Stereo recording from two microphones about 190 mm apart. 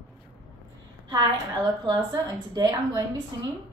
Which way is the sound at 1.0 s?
25° right (ahead or behind).